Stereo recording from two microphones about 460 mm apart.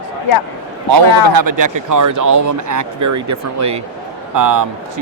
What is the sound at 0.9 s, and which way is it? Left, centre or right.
Speech, right.